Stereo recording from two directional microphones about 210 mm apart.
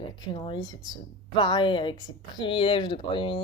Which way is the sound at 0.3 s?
20° left (ahead or behind).